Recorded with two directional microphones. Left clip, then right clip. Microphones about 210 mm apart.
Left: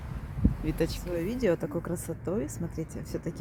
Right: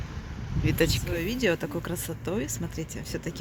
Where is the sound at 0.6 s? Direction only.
Centre (ahead or behind).